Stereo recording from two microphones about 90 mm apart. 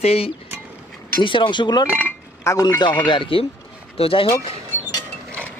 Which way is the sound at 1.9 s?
20° right (ahead or behind).